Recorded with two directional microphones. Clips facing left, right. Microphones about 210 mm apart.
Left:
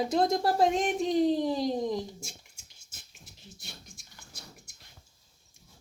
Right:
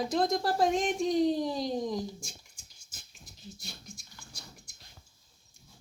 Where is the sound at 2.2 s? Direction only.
25° left (ahead or behind).